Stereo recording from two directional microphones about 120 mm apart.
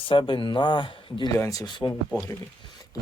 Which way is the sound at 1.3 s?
30° left (ahead or behind).